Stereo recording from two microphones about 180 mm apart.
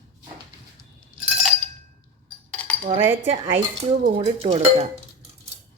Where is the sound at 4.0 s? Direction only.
45° right (ahead or behind).